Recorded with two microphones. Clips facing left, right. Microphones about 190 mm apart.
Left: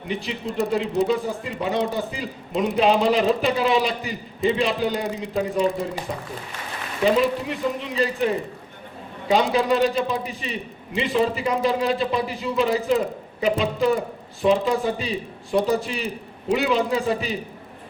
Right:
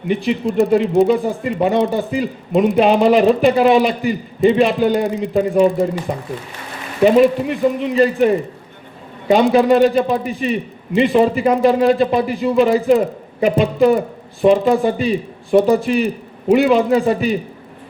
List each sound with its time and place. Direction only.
0.1 s a man's voice: 55° right (ahead or behind)